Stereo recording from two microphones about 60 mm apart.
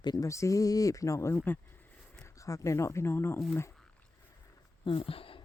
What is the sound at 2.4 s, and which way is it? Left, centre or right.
Speech, left.